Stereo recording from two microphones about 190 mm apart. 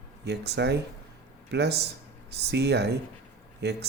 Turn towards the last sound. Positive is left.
turn(degrees=-60)  # may be behind; listen again after turning